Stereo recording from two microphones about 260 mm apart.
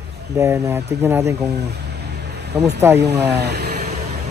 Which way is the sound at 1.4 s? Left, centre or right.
Right.